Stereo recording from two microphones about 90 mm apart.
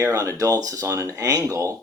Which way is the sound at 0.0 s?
45° right (ahead or behind).